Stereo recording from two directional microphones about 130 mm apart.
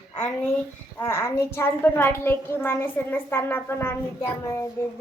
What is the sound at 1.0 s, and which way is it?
A child's voice, 20° left (ahead or behind).